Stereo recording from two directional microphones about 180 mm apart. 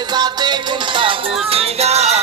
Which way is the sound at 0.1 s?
25° right (ahead or behind).